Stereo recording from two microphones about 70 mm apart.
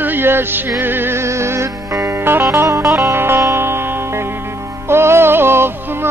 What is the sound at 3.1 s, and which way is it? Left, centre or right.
Music, right.